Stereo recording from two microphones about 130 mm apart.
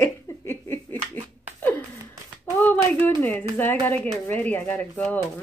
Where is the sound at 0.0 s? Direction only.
20° left (ahead or behind).